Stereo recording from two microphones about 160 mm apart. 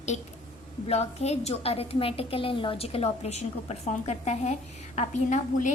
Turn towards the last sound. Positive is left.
turn(degrees=50)  # may be behind; listen again after turning